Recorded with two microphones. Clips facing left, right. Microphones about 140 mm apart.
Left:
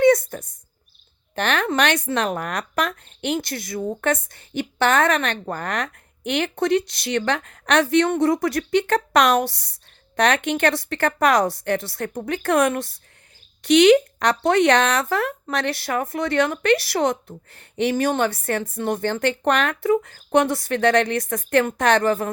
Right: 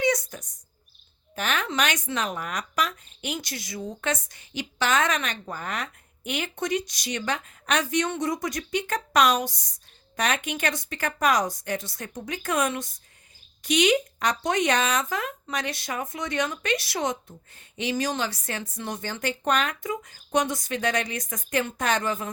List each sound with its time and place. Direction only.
0.0 s bird: 55° left (ahead or behind)
1.4 s speech: 70° left (ahead or behind)